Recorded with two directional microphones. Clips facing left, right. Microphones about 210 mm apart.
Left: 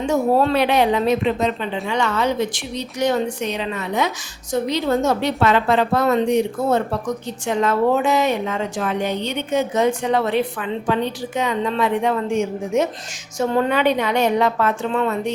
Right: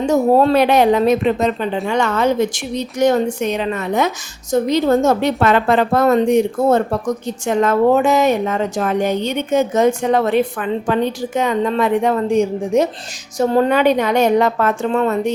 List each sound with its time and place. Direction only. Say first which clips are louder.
0.0 s a woman's voice: right 4 dB; 40° right (ahead or behind)